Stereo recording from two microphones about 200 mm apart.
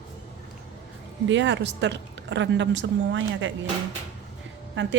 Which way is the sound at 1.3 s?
65° right (ahead or behind).